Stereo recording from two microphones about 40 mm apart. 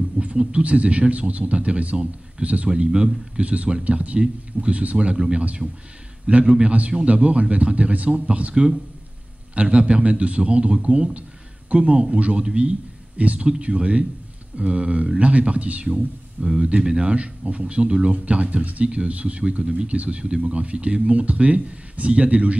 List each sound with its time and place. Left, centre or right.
0.2 s speech: right
18.1 s speech: right